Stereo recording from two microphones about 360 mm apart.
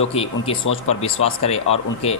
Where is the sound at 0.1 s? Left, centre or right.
Centre.